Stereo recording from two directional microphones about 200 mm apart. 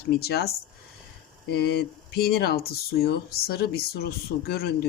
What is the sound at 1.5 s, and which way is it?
Speech, 50° left (ahead or behind).